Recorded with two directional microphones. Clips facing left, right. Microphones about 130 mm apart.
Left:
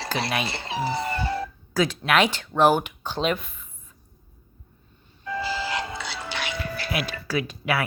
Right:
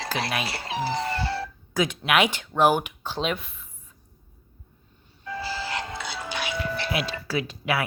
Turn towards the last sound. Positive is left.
turn(degrees=-25)  # may be behind; listen again after turning